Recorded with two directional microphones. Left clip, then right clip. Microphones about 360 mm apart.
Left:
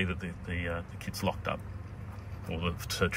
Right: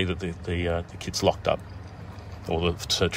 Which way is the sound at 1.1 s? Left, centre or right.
Right.